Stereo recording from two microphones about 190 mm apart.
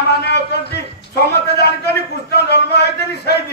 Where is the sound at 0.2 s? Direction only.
60° left (ahead or behind).